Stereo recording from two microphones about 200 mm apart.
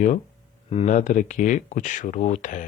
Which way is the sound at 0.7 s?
35° left (ahead or behind).